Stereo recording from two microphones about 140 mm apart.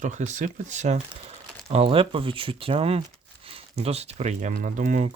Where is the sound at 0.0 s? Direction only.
60° right (ahead or behind).